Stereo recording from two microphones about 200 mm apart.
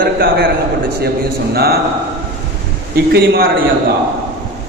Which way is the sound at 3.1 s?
50° right (ahead or behind).